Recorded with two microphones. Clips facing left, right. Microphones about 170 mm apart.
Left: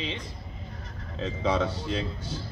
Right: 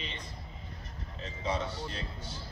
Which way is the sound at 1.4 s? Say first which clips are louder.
Left 7 dB; 90° left.